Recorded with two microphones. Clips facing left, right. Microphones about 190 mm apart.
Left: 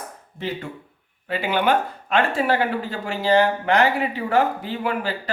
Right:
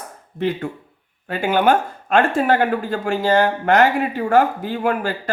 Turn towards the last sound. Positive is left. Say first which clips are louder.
# right 4 dB
turn(degrees=-50)  # may be behind; listen again after turning